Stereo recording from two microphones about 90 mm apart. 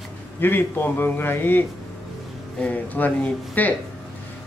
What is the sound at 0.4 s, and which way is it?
A man's voice, 25° left (ahead or behind).